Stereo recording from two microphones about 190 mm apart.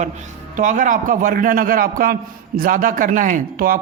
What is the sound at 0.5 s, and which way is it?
A man's voice, 45° right (ahead or behind).